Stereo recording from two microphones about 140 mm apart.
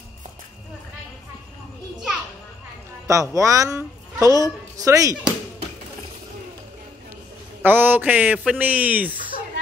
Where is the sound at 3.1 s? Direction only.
25° right (ahead or behind).